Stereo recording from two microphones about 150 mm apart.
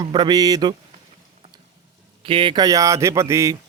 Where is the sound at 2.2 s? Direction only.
35° right (ahead or behind); by 3.5 s 20° right (ahead or behind).